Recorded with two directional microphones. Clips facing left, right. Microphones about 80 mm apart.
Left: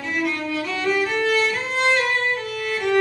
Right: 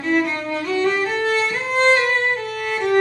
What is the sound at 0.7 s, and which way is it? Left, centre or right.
Music, right.